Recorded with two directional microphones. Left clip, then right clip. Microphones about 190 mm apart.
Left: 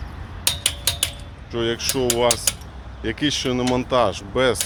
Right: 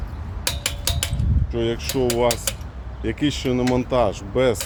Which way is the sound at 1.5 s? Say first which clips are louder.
Left 1 dB; 10° right (ahead or behind).